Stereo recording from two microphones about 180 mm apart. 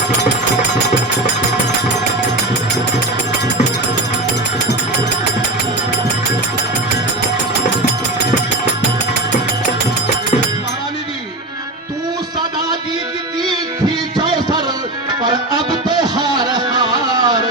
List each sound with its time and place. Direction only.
15.2 s music: 25° right (ahead or behind)